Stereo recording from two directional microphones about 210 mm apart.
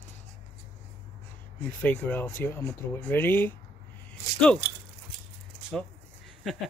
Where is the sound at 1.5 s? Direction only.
10° left (ahead or behind).